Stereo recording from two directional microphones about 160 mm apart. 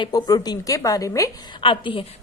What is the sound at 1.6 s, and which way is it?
Speech, 35° left (ahead or behind).